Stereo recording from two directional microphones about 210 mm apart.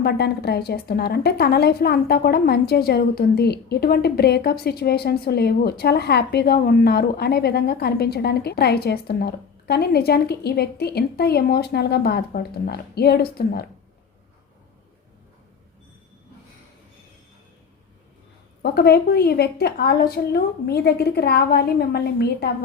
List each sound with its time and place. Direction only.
0.0 s a woman's voice: 50° left (ahead or behind)
18.6 s a woman's voice: 50° left (ahead or behind)